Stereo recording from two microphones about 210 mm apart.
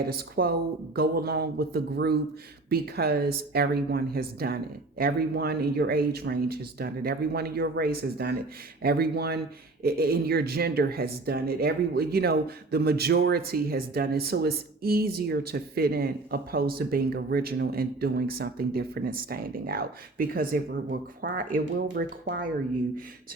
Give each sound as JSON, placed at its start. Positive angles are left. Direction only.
{"t": 0.1, "sound": "speech", "side_deg": -45}